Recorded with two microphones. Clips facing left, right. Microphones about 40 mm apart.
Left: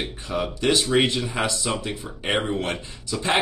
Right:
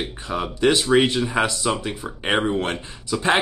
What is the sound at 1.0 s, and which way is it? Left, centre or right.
Speech, right.